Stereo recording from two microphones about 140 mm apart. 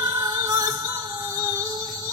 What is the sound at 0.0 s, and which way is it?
Music, 30° right (ahead or behind).